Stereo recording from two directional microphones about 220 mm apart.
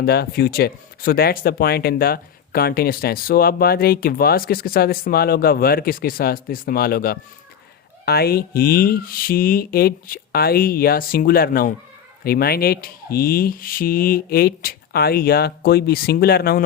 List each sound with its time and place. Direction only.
0.0 s speech: 45° left (ahead or behind)